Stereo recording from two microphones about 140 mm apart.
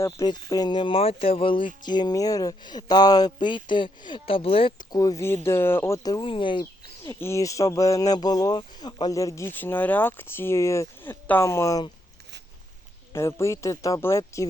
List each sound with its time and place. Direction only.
0.0 s speech: 25° left (ahead or behind)
4.9 s speech: 25° left (ahead or behind)
6.0 s speech: 30° left (ahead or behind)
7.0 s speech: 20° left (ahead or behind)
13.1 s speech: 20° left (ahead or behind)